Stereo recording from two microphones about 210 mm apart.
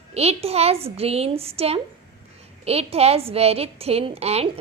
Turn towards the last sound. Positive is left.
turn(degrees=-30)  # may be behind; listen again after turning